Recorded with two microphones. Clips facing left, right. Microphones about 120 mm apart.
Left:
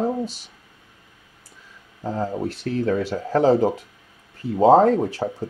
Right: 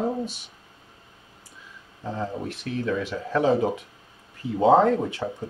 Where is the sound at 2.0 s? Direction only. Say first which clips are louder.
Left 5 dB; 40° left (ahead or behind).